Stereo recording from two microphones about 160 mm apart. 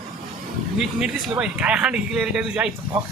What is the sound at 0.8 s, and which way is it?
Speech, 5° right (ahead or behind).